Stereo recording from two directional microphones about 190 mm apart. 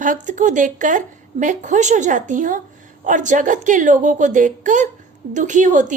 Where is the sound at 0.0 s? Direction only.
40° right (ahead or behind).